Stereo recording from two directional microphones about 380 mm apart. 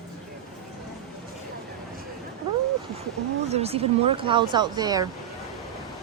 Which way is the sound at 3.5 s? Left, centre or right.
Centre.